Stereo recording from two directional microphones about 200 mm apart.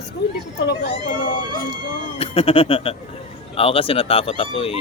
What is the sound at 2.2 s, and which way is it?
Speech, 30° left (ahead or behind).